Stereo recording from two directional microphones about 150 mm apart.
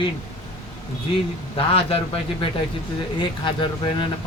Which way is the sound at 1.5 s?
40° left (ahead or behind).